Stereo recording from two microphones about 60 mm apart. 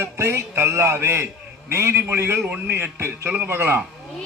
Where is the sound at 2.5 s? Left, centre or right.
Right.